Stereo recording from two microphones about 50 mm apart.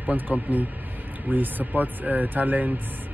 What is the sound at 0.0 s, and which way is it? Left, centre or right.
Speech, right.